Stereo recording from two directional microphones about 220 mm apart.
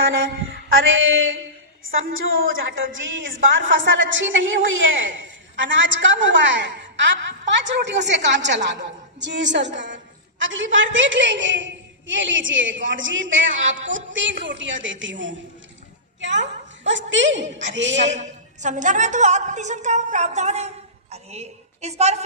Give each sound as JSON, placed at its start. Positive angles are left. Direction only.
{"t": 0.8, "sound": "a woman's voice", "side_deg": -60}
{"t": 16.2, "sound": "a sound", "side_deg": -55}
{"t": 17.1, "sound": "a woman's voice", "side_deg": -55}
{"t": 18.0, "sound": "a woman's voice", "side_deg": -30}